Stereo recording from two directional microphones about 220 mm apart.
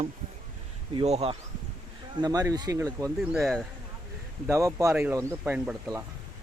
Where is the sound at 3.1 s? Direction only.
Centre (ahead or behind).